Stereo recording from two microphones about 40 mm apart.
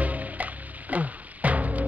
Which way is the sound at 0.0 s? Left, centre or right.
Right.